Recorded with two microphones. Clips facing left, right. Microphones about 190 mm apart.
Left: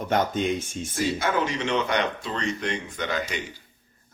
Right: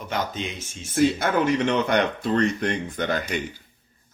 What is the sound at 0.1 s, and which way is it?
Speech, 50° left (ahead or behind).